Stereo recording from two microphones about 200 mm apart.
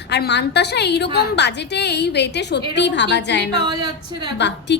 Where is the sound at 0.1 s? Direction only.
60° left (ahead or behind).